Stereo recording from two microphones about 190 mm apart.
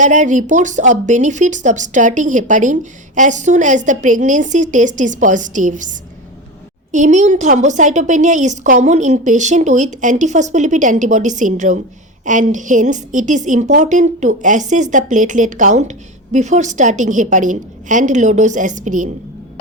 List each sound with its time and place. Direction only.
0.0 s a woman's voice: 40° right (ahead or behind)